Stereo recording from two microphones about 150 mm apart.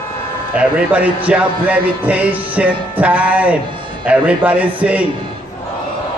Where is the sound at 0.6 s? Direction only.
10° right (ahead or behind).